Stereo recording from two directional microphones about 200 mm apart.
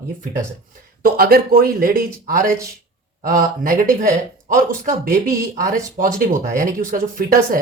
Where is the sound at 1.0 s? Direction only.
45° right (ahead or behind).